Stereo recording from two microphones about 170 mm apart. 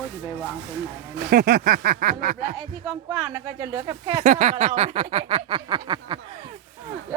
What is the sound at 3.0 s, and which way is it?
Speech, 20° right (ahead or behind).